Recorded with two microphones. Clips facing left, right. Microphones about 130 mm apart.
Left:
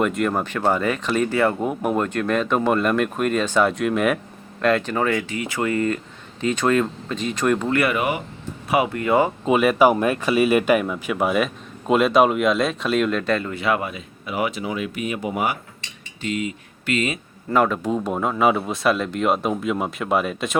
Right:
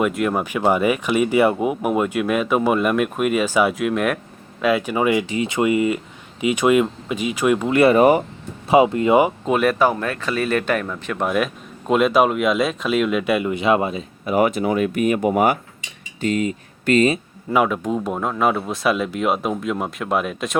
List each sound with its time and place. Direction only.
0.0 s speech: 5° right (ahead or behind)
7.7 s speech: 25° right (ahead or behind)
7.9 s speech: 40° right (ahead or behind)
8.7 s speech: 25° right (ahead or behind)
9.5 s speech: 5° left (ahead or behind); by 14.0 s 25° right (ahead or behind)
14.3 s speech: 45° right (ahead or behind)
17.5 s speech: 5° right (ahead or behind)